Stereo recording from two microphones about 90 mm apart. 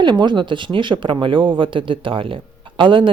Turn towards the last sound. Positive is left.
turn(degrees=-65)  # may be behind; listen again after turning